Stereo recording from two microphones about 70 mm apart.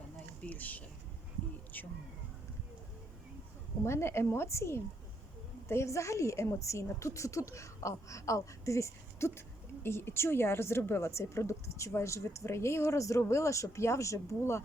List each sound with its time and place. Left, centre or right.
0.4 s speech: left
3.8 s a woman's voice: left